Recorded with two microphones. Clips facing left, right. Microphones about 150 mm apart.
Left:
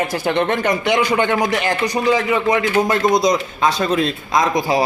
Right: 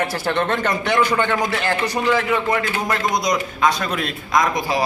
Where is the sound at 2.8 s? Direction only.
25° left (ahead or behind).